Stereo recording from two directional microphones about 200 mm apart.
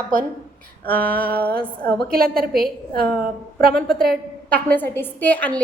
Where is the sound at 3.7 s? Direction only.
Centre (ahead or behind).